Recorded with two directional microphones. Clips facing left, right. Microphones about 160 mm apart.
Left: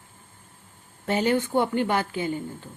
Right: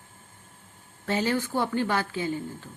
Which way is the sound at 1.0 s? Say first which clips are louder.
Left 3 dB; 25° left (ahead or behind).